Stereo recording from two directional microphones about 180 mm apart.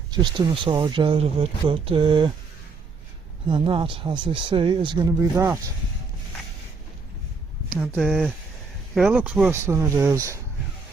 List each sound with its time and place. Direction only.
0.1 s speech: 25° right (ahead or behind)
3.5 s speech: 30° right (ahead or behind)
7.7 s speech: centre (ahead or behind); by 10.4 s 15° right (ahead or behind)